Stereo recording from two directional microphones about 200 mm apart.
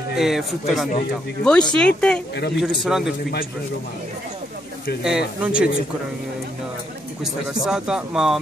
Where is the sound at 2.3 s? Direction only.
55° left (ahead or behind).